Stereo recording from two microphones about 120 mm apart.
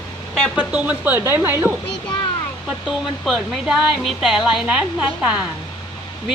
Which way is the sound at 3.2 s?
Centre (ahead or behind).